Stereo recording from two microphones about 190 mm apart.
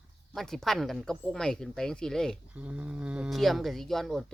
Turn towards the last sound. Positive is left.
turn(degrees=0)  # may be behind; listen again after turning